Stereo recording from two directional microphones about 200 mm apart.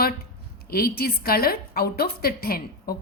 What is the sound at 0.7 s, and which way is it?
A woman's voice, 50° left (ahead or behind).